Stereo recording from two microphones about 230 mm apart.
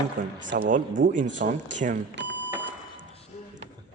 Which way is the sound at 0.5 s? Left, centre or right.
Right.